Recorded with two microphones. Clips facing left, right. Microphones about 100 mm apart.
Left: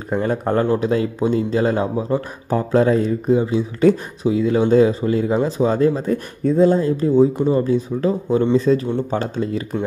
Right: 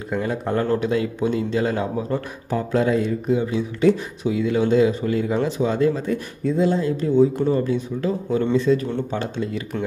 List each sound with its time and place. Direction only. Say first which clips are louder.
0.1 s speech: left 4 dB; 50° left (ahead or behind)
0.7 s speech: left 3 dB; 35° left (ahead or behind)
2.5 s speech: left 4 dB; 35° left (ahead or behind)
3.8 s speech: left 2 dB; 45° left (ahead or behind)
4.3 s speech: left 4 dB; 35° left (ahead or behind)